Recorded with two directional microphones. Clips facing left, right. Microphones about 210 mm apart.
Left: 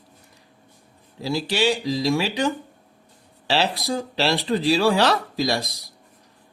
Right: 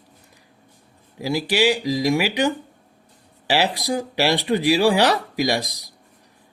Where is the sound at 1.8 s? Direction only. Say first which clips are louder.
Right 2 dB; 15° right (ahead or behind).